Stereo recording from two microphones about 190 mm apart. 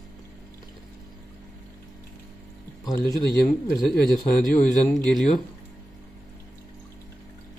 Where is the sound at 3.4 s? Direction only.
Centre (ahead or behind).